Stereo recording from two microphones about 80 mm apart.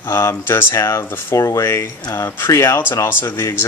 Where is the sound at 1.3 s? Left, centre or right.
Left.